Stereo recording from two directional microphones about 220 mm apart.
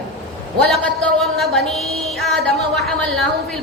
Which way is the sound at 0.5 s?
Centre (ahead or behind).